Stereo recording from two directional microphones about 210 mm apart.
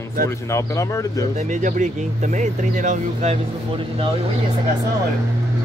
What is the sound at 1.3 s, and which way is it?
Speech, 35° right (ahead or behind).